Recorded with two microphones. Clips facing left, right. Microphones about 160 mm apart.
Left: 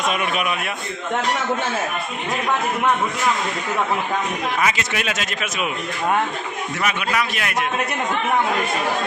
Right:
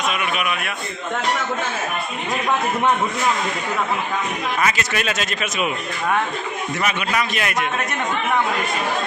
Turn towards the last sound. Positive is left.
turn(degrees=5)  # may be behind; listen again after turning